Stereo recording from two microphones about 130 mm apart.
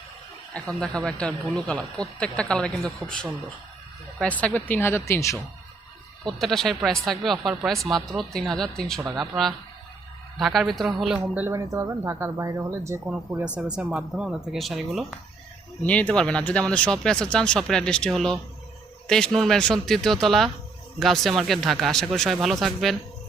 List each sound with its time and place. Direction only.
0.5 s speech: 10° left (ahead or behind)
6.2 s speech: centre (ahead or behind)
11.4 s speech: 25° right (ahead or behind)
13.1 s speech: 10° right (ahead or behind)
15.8 s speech: 10° left (ahead or behind)